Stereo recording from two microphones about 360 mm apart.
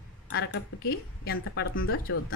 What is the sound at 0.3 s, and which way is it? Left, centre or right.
A woman's voice, left.